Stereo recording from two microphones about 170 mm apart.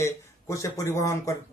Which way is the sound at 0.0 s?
20° left (ahead or behind).